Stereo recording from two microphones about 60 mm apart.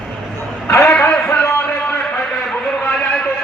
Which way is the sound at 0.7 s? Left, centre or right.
Left.